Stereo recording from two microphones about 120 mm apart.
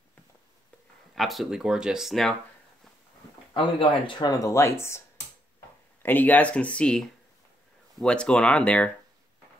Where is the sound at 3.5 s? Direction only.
45° left (ahead or behind); by 5.0 s 20° left (ahead or behind).